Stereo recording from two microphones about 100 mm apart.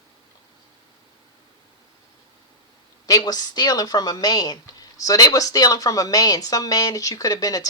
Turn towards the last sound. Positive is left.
turn(degrees=40)  # may be behind; listen again after turning